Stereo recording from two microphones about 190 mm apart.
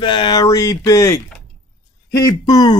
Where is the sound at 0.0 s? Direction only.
25° left (ahead or behind).